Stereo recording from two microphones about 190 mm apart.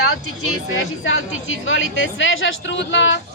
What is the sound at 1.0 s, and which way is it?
A woman's voice, 90° left.